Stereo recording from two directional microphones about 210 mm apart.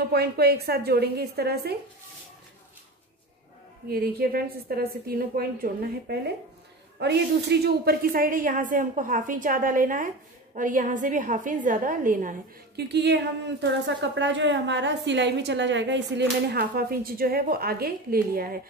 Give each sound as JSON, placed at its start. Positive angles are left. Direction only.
{"t": 0.1, "sound": "a woman's voice", "side_deg": -50}
{"t": 3.9, "sound": "a woman's voice", "side_deg": -45}